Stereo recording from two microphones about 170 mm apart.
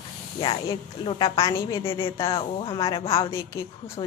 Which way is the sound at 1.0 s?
30° left (ahead or behind).